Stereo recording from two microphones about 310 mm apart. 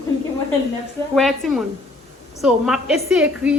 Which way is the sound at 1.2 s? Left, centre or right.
Centre.